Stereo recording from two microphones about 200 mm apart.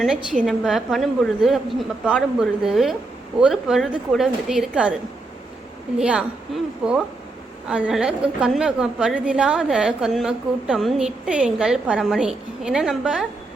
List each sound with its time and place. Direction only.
0.0 s a woman's voice: 5° right (ahead or behind)
6.0 s a woman's voice: 5° right (ahead or behind)